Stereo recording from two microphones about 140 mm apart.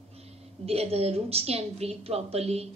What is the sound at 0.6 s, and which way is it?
A woman's voice, 45° right (ahead or behind).